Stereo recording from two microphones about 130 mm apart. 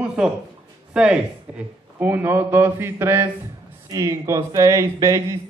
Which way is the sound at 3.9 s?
25° right (ahead or behind).